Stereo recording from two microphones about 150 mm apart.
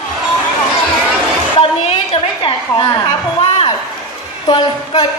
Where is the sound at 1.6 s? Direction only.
40° left (ahead or behind).